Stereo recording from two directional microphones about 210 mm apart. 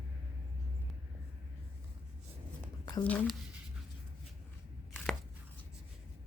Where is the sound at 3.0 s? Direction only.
5° left (ahead or behind).